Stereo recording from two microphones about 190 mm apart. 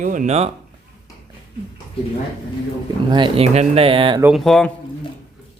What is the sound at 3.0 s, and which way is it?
Speech, 25° right (ahead or behind).